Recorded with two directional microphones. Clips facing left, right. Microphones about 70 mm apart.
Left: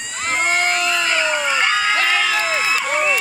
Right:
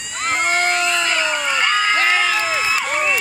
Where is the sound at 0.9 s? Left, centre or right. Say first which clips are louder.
Left 1 dB; centre.